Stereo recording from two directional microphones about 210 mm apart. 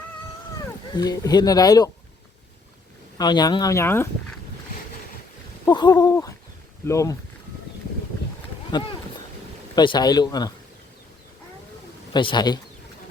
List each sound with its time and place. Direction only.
0.6 s speech: 20° left (ahead or behind)
3.2 s speech: 20° left (ahead or behind)
5.6 s speech: 20° left (ahead or behind)
9.7 s speech: 20° left (ahead or behind)
12.1 s speech: 20° left (ahead or behind)